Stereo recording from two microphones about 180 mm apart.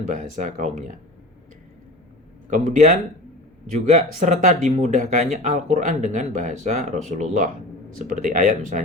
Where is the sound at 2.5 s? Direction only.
45° right (ahead or behind).